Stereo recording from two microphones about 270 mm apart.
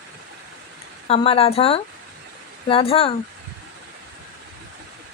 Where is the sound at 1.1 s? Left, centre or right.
Left.